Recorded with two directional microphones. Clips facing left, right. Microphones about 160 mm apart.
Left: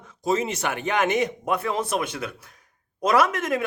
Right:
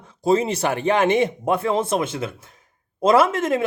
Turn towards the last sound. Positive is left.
turn(degrees=-25)  # may be behind; listen again after turning